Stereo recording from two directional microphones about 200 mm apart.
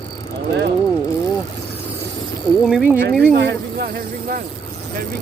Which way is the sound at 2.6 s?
Centre (ahead or behind).